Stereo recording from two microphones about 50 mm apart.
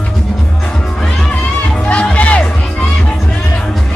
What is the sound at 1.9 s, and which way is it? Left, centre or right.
Music, left.